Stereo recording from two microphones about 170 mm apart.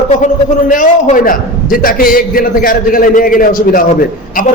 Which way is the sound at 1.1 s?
55° left (ahead or behind).